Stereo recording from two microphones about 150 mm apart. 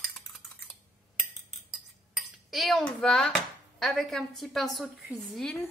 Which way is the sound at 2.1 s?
Centre (ahead or behind).